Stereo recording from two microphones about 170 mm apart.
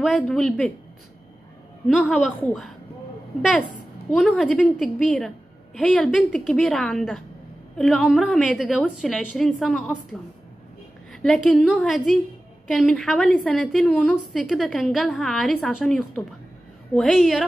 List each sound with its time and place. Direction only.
0.0 s a woman's voice: centre (ahead or behind)
1.9 s a woman's voice: centre (ahead or behind)
4.1 s a woman's voice: centre (ahead or behind)
11.1 s a woman's voice: centre (ahead or behind)